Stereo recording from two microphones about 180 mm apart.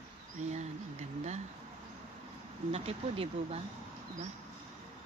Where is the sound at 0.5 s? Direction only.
40° right (ahead or behind).